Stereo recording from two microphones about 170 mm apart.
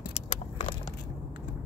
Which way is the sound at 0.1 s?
40° left (ahead or behind).